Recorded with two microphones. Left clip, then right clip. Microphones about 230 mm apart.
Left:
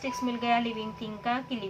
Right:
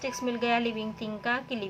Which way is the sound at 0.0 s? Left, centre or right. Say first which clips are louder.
Right 1 dB; right.